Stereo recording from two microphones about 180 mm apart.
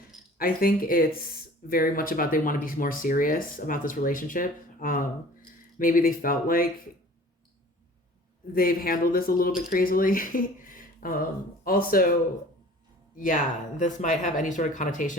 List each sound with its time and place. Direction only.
0.3 s speech: 50° left (ahead or behind)
8.5 s speech: 55° left (ahead or behind)
13.1 s speech: 45° left (ahead or behind)